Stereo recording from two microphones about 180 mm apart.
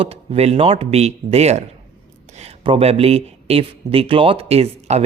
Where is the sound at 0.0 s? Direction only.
35° right (ahead or behind).